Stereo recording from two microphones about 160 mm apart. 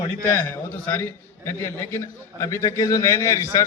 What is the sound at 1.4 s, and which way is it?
A man's voice, 15° left (ahead or behind).